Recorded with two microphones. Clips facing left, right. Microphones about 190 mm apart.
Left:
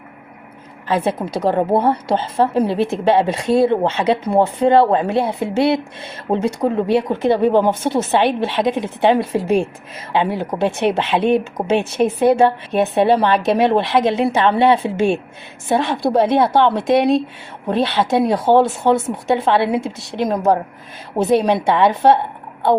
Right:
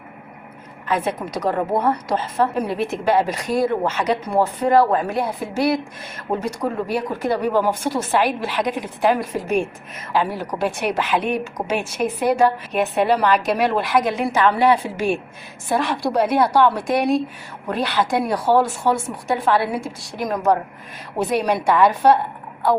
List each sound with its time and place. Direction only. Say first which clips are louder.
0.9 s a woman's voice: left 4 dB; 30° left (ahead or behind)